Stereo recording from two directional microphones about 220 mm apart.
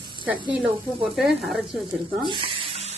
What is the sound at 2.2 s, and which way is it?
Sizzle, 20° right (ahead or behind).